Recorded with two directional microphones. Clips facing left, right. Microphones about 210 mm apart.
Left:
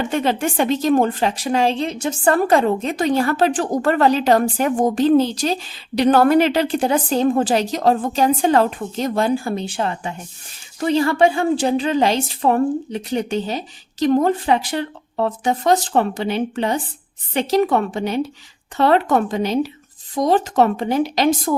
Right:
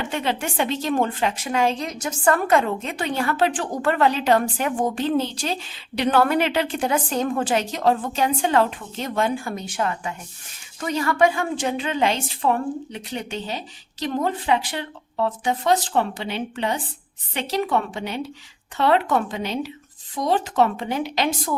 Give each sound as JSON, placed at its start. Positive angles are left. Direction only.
{"t": 0.1, "sound": "a woman's voice", "side_deg": 40}